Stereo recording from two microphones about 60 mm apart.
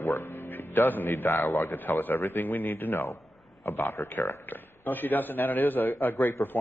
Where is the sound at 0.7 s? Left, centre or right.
Left.